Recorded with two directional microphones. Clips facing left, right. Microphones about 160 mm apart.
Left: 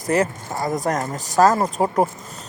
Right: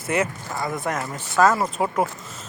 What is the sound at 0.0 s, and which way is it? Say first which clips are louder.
Speech: left 4 dB; 40° left (ahead or behind).